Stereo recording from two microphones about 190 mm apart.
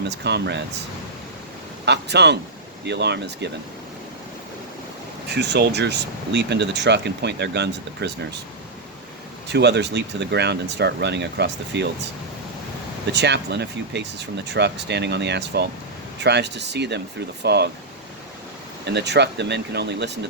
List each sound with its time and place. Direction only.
0.1 s speech: 65° right (ahead or behind)
1.8 s speech: 65° right (ahead or behind)
5.3 s speech: 60° right (ahead or behind)
9.5 s speech: 65° right (ahead or behind)
13.1 s speech: 65° right (ahead or behind)
18.9 s speech: 60° right (ahead or behind)